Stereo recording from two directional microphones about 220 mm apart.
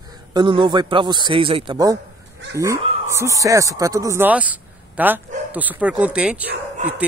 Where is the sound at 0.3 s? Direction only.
20° right (ahead or behind).